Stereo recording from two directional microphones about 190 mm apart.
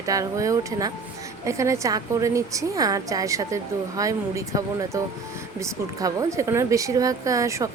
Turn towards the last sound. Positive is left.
turn(degrees=-15)  # may be behind; listen again after turning